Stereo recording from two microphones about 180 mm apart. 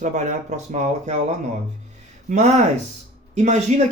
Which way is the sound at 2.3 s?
40° right (ahead or behind).